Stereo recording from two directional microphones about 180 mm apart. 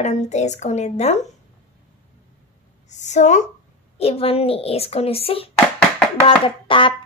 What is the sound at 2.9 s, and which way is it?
A child's voice, 40° left (ahead or behind).